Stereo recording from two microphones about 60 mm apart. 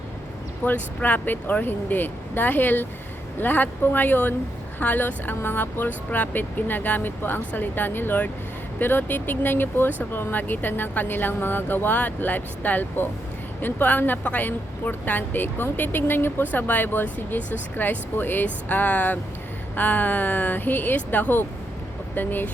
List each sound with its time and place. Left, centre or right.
0.6 s a woman's voice: left